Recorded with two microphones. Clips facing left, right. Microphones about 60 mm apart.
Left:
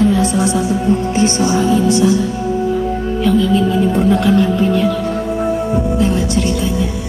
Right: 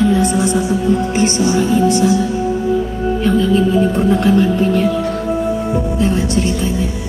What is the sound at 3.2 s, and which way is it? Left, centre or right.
Speech, right.